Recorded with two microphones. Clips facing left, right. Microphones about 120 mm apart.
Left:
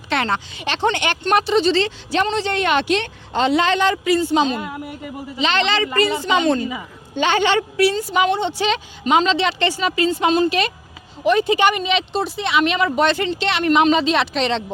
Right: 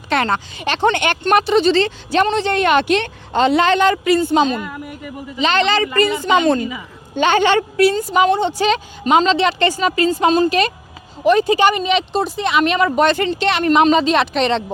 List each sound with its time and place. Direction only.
0.1 s speech: 45° right (ahead or behind)
4.6 s speech: 25° left (ahead or behind)
5.4 s speech: 45° right (ahead or behind)
6.6 s a man's voice: 30° left (ahead or behind)
7.2 s speech: 50° right (ahead or behind)